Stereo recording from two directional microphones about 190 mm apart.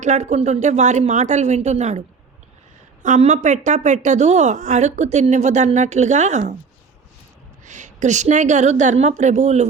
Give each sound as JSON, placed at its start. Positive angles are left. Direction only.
{"t": 0.0, "sound": "a woman's voice", "side_deg": -35}
{"t": 3.0, "sound": "a woman's voice", "side_deg": -40}
{"t": 7.6, "sound": "a woman's voice", "side_deg": -40}